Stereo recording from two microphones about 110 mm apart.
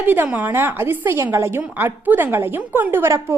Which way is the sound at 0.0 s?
15° right (ahead or behind).